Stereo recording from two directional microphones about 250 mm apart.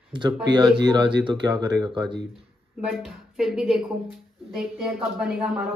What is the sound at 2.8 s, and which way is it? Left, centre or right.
A woman's voice, centre.